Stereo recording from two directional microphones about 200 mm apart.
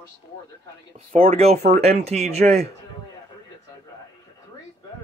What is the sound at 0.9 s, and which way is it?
Speech, 30° right (ahead or behind).